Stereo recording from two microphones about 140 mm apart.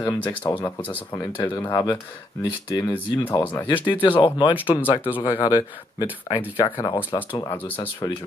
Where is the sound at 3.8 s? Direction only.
35° left (ahead or behind).